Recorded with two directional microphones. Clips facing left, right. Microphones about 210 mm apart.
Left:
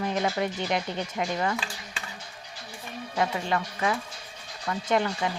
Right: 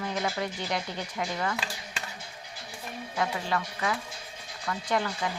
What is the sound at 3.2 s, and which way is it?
Speech, 25° left (ahead or behind).